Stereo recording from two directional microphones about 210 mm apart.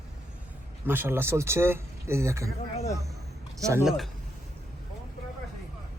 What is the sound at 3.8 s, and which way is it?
Speech, centre (ahead or behind).